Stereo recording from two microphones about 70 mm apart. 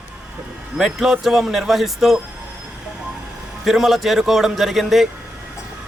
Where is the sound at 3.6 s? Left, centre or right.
Centre.